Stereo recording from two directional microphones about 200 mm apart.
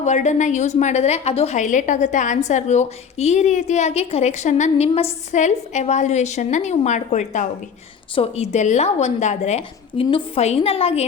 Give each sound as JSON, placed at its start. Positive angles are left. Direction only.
{"t": 0.0, "sound": "a woman's voice", "side_deg": 35}